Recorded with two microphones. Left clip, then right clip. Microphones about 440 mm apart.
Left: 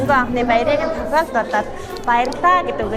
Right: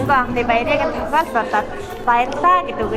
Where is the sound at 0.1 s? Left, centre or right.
Centre.